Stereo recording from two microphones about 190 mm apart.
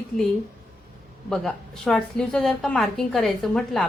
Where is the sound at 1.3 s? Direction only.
5° left (ahead or behind).